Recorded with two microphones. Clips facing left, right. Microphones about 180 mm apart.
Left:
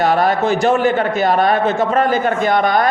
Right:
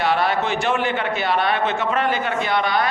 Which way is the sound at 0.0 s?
45° left (ahead or behind).